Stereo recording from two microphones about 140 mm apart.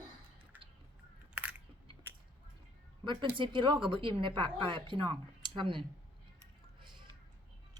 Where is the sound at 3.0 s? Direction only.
35° right (ahead or behind).